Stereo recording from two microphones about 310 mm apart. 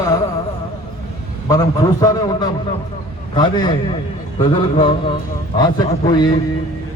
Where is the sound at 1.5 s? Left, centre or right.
Centre.